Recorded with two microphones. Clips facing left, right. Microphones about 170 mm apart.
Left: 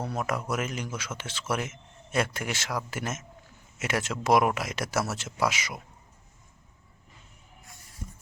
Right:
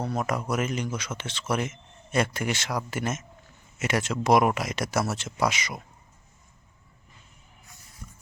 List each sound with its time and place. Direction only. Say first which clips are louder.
0.0 s speech: right 2 dB; 5° left (ahead or behind)
8.0 s stir: left 5 dB; 25° left (ahead or behind)